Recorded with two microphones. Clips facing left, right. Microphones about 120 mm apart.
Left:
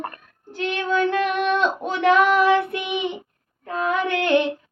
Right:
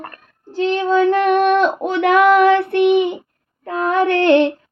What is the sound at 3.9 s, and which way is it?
Female singing, 60° right (ahead or behind).